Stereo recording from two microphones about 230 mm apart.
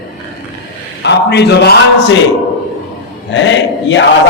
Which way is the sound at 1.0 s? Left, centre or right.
Left.